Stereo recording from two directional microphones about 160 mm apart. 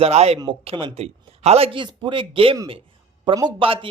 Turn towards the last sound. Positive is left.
turn(degrees=-35)  # may be behind; listen again after turning